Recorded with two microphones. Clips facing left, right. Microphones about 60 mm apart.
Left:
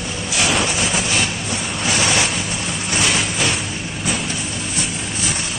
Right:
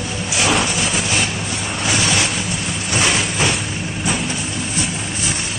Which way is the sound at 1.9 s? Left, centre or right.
Left.